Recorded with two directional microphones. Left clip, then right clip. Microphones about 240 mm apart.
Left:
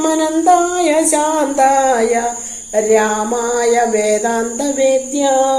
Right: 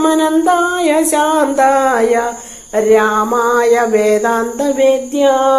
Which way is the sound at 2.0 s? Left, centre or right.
Centre.